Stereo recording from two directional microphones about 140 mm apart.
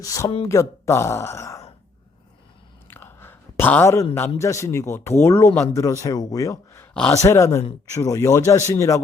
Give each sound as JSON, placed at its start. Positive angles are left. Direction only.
{"t": 0.0, "sound": "speech", "side_deg": 25}
{"t": 2.8, "sound": "chewing", "side_deg": 15}
{"t": 4.4, "sound": "speech", "side_deg": 20}